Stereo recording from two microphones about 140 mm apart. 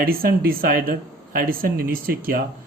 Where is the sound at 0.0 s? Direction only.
90° right.